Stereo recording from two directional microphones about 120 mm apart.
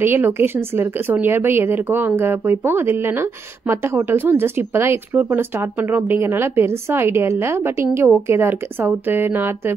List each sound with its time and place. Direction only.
0.0 s speech: 20° right (ahead or behind)